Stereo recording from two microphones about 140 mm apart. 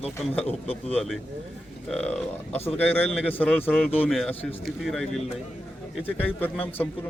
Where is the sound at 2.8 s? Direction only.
15° left (ahead or behind).